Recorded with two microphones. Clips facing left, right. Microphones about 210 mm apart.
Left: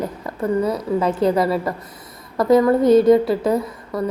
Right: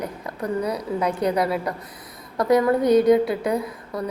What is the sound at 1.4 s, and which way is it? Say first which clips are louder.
A woman's voice: left 4 dB; centre (ahead or behind).